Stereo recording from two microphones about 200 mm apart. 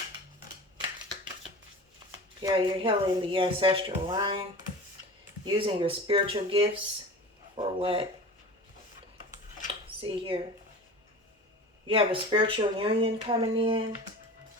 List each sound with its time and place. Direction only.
2.4 s speech: 20° right (ahead or behind)
5.5 s speech: 25° right (ahead or behind)
9.8 s speech: 25° right (ahead or behind)
11.9 s speech: 25° right (ahead or behind)